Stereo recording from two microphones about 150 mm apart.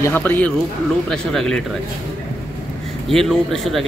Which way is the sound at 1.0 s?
5° left (ahead or behind).